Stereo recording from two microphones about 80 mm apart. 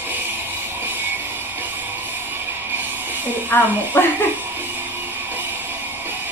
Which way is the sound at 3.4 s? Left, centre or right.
Left.